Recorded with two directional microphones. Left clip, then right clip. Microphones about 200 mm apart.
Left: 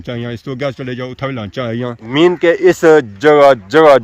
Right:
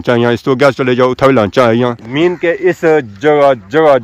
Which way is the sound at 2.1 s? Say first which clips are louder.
Left 5 dB; 25° left (ahead or behind).